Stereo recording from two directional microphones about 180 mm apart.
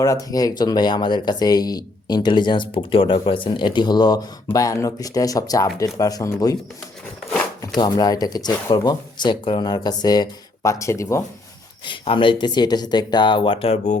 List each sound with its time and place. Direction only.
0.0 s speech: 20° left (ahead or behind)
7.8 s speech: 20° left (ahead or behind)
11.9 s speech: 25° left (ahead or behind)